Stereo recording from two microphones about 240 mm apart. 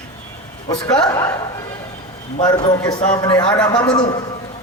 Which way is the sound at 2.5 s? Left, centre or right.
Centre.